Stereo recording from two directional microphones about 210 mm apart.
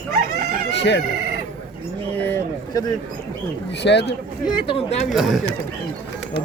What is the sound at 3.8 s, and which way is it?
Speech, 55° left (ahead or behind).